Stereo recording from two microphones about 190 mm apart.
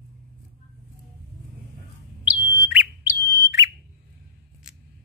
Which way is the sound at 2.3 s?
10° right (ahead or behind).